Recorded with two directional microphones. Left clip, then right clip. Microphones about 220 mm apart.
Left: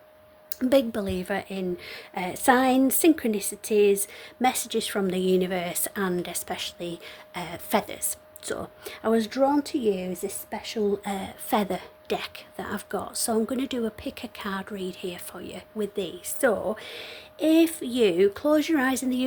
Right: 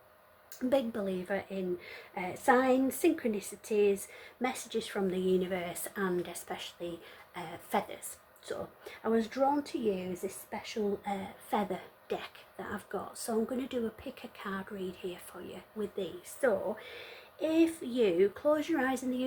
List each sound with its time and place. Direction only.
0.7 s speech: 50° left (ahead or behind)